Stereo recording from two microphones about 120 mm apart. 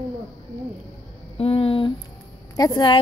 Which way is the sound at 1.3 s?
55° left (ahead or behind).